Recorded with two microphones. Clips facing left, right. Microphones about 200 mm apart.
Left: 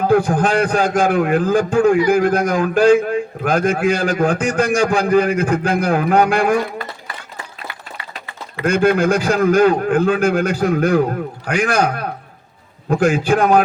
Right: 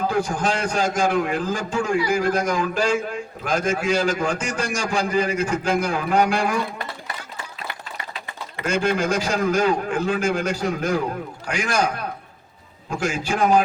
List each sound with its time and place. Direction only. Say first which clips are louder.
0.1 s a man's voice: left 8 dB; 60° left (ahead or behind)
8.6 s a man's voice: left 7 dB; 55° left (ahead or behind)